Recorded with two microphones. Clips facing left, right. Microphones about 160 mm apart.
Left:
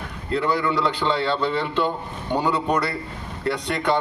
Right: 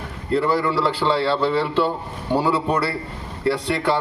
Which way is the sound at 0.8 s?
30° right (ahead or behind).